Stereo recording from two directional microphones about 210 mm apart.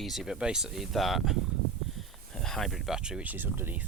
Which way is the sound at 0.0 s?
Centre (ahead or behind).